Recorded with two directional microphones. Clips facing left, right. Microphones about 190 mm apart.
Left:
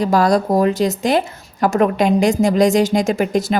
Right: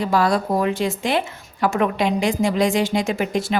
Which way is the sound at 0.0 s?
40° left (ahead or behind).